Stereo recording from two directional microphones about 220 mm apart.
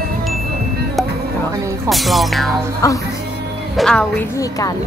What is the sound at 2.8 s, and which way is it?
Speech, 15° left (ahead or behind).